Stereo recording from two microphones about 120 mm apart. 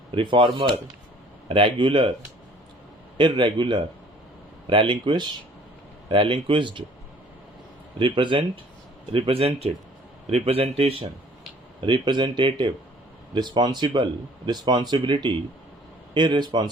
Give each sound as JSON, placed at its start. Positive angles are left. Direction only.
{"t": 0.1, "sound": "speech", "side_deg": -45}
{"t": 3.2, "sound": "speech", "side_deg": -40}
{"t": 7.9, "sound": "a man's voice", "side_deg": -45}
{"t": 11.9, "sound": "speech", "side_deg": -40}